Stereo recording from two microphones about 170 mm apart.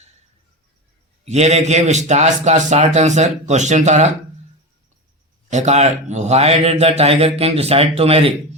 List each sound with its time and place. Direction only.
1.2 s a man's voice: 40° right (ahead or behind)
5.5 s a man's voice: 45° right (ahead or behind)